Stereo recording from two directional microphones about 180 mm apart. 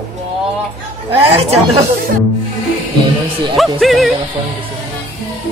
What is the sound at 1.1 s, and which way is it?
Speech, 35° right (ahead or behind).